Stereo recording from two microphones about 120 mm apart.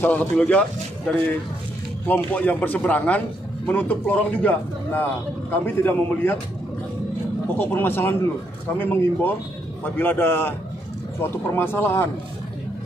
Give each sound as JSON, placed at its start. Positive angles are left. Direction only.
{"t": 0.0, "sound": "a man's voice", "side_deg": 15}
{"t": 7.5, "sound": "speech", "side_deg": 20}